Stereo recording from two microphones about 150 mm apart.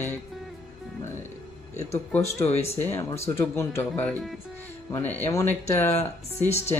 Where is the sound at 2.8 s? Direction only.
15° left (ahead or behind).